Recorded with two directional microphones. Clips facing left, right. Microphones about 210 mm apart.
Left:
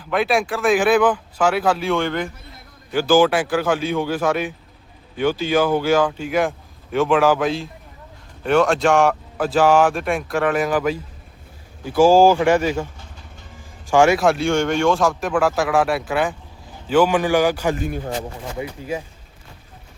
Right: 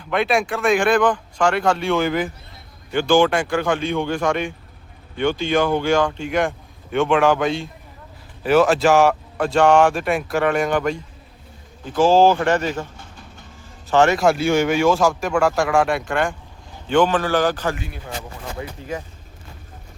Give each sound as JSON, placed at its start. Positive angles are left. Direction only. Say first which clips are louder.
{"t": 0.0, "sound": "speech", "louder": "even", "side_deg": 0}
{"t": 17.7, "sound": "a man's voice", "louder": "left 7 dB", "side_deg": 45}
{"t": 18.5, "sound": "speech", "louder": "left 2 dB", "side_deg": 10}